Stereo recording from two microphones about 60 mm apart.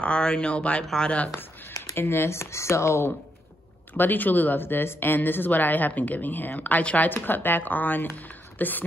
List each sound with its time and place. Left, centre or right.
0.0 s speech: centre
1.8 s speech: left
3.9 s speech: left
7.1 s speech: left